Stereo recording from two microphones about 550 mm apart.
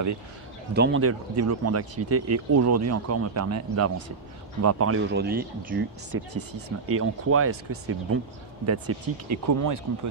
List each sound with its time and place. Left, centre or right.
0.7 s speech: centre